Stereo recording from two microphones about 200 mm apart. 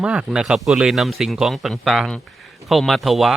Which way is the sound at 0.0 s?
5° right (ahead or behind).